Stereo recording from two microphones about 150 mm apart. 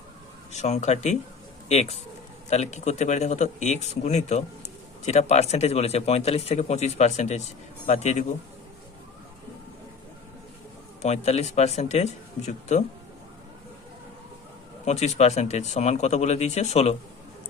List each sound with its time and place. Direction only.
0.5 s speech: 50° left (ahead or behind)
11.0 s speech: 45° left (ahead or behind)
14.8 s speech: 50° left (ahead or behind)